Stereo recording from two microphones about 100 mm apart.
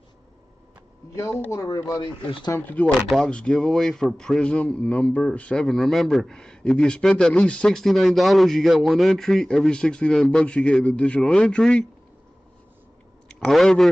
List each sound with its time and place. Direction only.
1.5 s speech: 35° left (ahead or behind)
2.5 s a man's voice: 15° left (ahead or behind)
13.4 s a man's voice: 5° left (ahead or behind)